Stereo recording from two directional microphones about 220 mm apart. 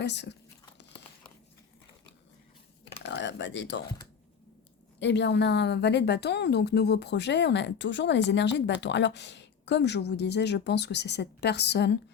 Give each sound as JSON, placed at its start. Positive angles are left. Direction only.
{"t": 0.0, "sound": "a woman's voice", "side_deg": 50}
{"t": 3.0, "sound": "speech", "side_deg": 55}
{"t": 4.9, "sound": "a woman's voice", "side_deg": 55}